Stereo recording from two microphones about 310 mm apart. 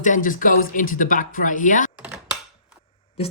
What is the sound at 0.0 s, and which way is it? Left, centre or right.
Speech, left.